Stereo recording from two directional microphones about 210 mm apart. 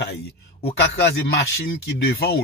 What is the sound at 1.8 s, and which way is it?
Speech, 50° left (ahead or behind).